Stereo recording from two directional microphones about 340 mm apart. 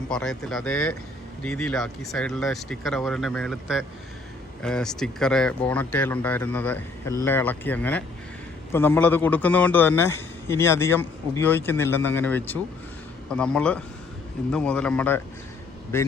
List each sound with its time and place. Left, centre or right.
0.1 s a man's voice: centre